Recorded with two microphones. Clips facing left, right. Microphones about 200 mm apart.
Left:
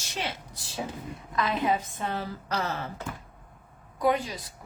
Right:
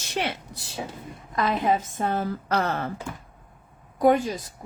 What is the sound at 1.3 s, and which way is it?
Speech, 45° right (ahead or behind).